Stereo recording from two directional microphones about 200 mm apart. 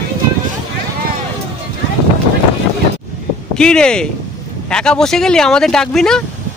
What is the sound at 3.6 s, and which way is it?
Speech, 5° left (ahead or behind).